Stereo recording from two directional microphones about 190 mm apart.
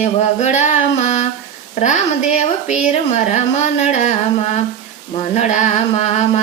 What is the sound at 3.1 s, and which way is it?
Speech, 35° left (ahead or behind).